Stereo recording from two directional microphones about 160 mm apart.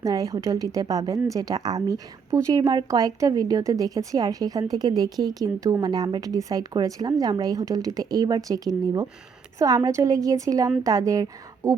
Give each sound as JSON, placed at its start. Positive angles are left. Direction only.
{"t": 0.0, "sound": "a woman's voice", "side_deg": -20}